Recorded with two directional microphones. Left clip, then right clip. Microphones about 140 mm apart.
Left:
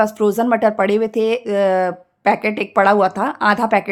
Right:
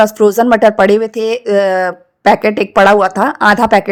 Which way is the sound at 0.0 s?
35° right (ahead or behind).